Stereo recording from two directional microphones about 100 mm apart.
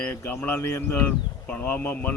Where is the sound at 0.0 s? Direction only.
20° left (ahead or behind).